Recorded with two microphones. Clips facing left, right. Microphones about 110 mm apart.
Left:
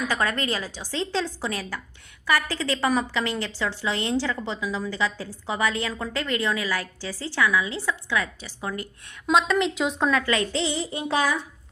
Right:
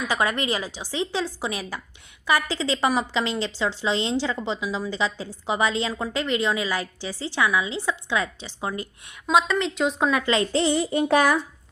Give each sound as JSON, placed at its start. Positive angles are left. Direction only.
{"t": 0.1, "sound": "a woman's voice", "side_deg": -15}
{"t": 9.2, "sound": "a woman's voice", "side_deg": 0}
{"t": 10.1, "sound": "speech", "side_deg": -15}
{"t": 10.5, "sound": "a sound", "side_deg": -50}